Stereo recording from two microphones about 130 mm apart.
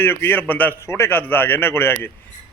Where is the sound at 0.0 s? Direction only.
15° left (ahead or behind).